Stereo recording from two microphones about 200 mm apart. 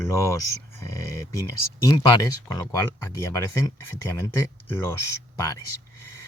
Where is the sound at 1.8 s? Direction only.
20° left (ahead or behind).